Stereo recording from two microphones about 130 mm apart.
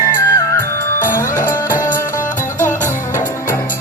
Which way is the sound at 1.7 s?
90° left.